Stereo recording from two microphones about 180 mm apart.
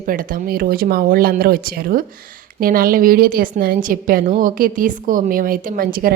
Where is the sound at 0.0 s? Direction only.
50° right (ahead or behind).